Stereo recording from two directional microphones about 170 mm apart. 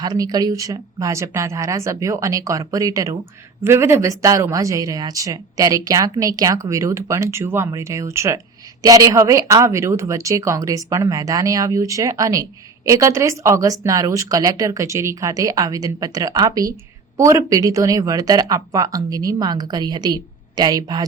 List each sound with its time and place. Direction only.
0.0 s speech: 20° right (ahead or behind)